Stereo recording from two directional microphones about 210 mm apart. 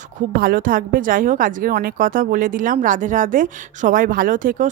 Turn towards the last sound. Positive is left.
turn(degrees=-40)  # may be behind; listen again after turning